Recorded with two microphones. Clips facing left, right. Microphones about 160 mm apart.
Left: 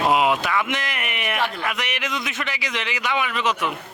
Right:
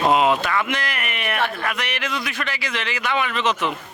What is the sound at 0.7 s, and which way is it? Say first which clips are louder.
Speech: right 1 dB; 20° left (ahead or behind).